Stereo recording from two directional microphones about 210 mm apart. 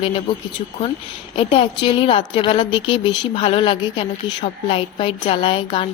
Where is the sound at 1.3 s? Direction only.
25° left (ahead or behind).